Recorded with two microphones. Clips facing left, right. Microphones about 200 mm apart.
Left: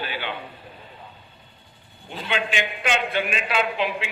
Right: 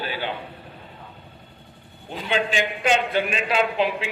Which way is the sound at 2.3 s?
35° right (ahead or behind).